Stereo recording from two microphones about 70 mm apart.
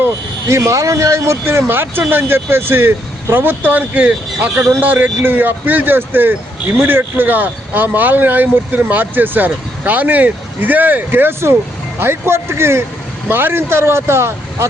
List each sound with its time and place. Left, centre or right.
0.0 s speech: right
1.5 s speech: right